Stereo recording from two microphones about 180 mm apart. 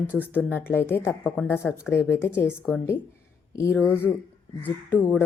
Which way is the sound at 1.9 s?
15° left (ahead or behind).